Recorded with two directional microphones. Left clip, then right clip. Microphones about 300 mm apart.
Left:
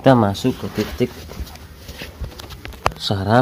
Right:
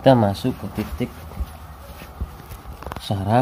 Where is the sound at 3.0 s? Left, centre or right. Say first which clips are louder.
Left 5 dB; centre.